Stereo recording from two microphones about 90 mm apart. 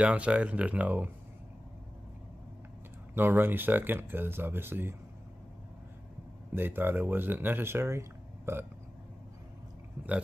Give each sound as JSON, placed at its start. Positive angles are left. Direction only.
{"t": 0.0, "sound": "speech", "side_deg": -15}
{"t": 3.2, "sound": "speech", "side_deg": -25}
{"t": 6.5, "sound": "speech", "side_deg": -25}
{"t": 10.0, "sound": "speech", "side_deg": -25}